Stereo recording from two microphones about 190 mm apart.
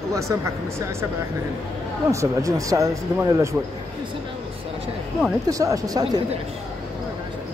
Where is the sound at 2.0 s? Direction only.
15° right (ahead or behind).